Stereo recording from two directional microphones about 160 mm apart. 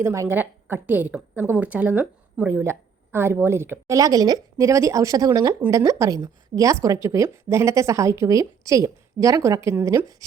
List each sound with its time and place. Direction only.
0.0 s a woman's voice: 15° right (ahead or behind)